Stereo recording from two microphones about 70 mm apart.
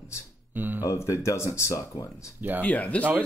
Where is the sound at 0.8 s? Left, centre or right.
Left.